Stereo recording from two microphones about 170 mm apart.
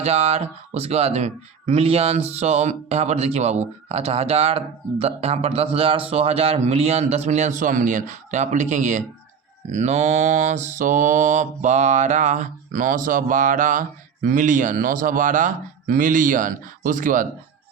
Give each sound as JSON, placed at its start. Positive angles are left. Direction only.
{"t": 0.0, "sound": "speech", "side_deg": -40}
{"t": 9.7, "sound": "mantra", "side_deg": -40}